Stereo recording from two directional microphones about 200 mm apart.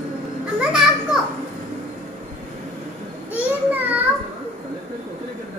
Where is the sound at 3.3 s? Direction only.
10° right (ahead or behind).